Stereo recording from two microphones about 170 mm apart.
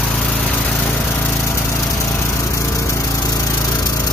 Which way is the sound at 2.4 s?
20° left (ahead or behind).